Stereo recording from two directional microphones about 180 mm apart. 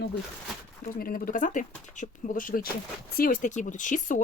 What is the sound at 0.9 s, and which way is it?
Speech, 55° left (ahead or behind).